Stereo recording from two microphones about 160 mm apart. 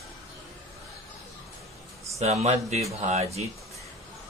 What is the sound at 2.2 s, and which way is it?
Speech, 45° right (ahead or behind).